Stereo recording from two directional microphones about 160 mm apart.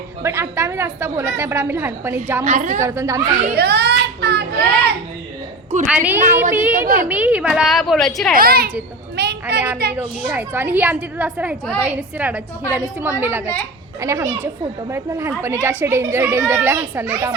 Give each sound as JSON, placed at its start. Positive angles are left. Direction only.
{"t": 0.2, "sound": "speech", "side_deg": -15}
{"t": 2.4, "sound": "a woman's voice", "side_deg": -50}
{"t": 2.8, "sound": "speech", "side_deg": -15}
{"t": 3.5, "sound": "a child's voice", "side_deg": -90}
{"t": 5.8, "sound": "speech", "side_deg": -5}
{"t": 6.8, "sound": "a child's voice", "side_deg": -60}
{"t": 7.1, "sound": "a woman's voice", "side_deg": -10}
{"t": 8.4, "sound": "a woman's voice", "side_deg": -70}
{"t": 9.1, "sound": "a sound", "side_deg": -90}
{"t": 9.9, "sound": "speech", "side_deg": -10}